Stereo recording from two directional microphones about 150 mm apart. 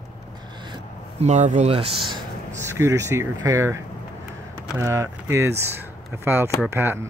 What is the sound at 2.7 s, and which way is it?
Speech, 20° right (ahead or behind).